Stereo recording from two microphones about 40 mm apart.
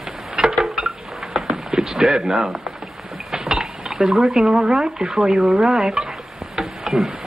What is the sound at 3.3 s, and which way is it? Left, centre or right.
Cutlery, centre.